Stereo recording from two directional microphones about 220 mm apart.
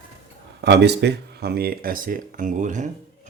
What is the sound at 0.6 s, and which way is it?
Speech, 50° right (ahead or behind).